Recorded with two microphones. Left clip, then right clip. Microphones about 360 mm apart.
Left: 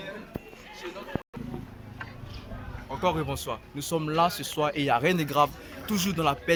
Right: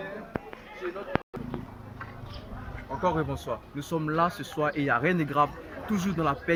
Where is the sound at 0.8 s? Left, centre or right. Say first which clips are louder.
Right 4 dB; centre.